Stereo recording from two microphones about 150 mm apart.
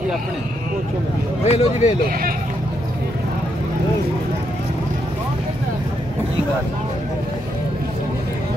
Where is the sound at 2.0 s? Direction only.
75° right (ahead or behind).